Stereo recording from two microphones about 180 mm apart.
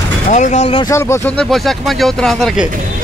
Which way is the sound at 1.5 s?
Centre (ahead or behind).